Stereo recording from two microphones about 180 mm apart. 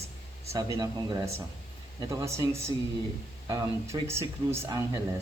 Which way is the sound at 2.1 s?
15° right (ahead or behind).